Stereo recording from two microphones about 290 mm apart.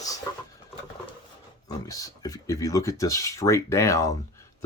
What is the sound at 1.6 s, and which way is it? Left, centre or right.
Speech, centre.